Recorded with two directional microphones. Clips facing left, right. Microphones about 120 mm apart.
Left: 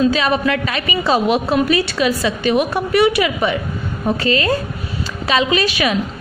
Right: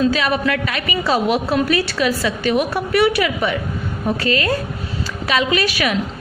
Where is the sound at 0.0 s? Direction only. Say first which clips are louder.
Left 2 dB; 25° left (ahead or behind).